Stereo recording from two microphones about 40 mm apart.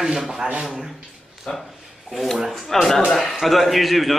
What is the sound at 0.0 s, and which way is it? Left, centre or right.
Speech, centre.